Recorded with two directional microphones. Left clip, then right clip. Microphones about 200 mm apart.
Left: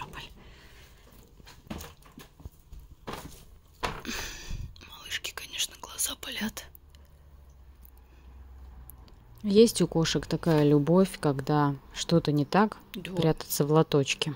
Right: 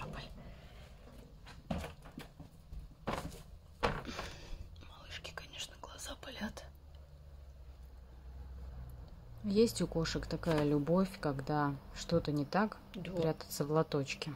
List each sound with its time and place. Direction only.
0.0 s a sound: 5° left (ahead or behind)
4.0 s whispering: 10° left (ahead or behind)
9.5 s speech: 35° left (ahead or behind)